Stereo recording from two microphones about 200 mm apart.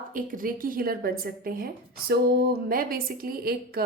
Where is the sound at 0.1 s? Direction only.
40° right (ahead or behind).